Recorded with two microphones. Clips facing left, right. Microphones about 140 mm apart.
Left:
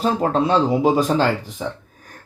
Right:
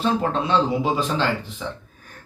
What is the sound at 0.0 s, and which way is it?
Speech, 40° left (ahead or behind).